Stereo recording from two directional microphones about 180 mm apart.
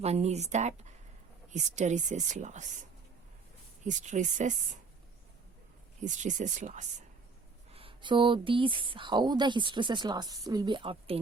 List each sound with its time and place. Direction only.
0.0 s speech: 35° right (ahead or behind)
3.8 s speech: 45° right (ahead or behind)
6.0 s speech: 45° right (ahead or behind)
7.7 s a woman's voice: 30° right (ahead or behind)